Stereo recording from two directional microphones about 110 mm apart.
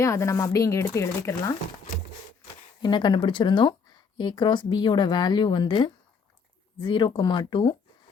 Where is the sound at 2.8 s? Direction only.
45° left (ahead or behind).